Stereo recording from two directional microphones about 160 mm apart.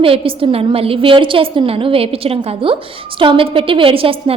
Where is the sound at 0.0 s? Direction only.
35° right (ahead or behind).